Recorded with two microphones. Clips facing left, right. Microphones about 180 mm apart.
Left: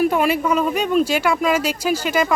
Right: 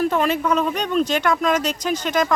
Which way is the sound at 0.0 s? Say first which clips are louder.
Left 2 dB; 10° left (ahead or behind).